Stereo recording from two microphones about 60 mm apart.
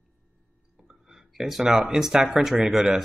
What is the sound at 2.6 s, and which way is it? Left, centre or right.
Speech, centre.